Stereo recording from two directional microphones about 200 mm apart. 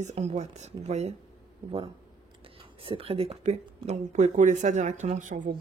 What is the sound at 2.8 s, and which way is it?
Speech, 30° right (ahead or behind).